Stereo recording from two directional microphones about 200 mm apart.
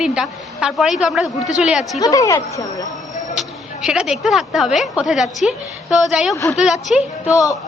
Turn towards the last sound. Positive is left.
turn(degrees=15)  # may be behind; listen again after turning